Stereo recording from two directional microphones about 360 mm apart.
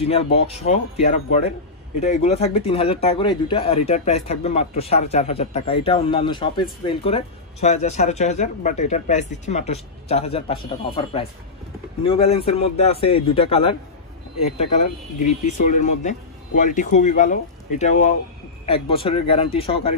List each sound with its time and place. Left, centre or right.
0.0 s speech: centre
15.5 s speech: centre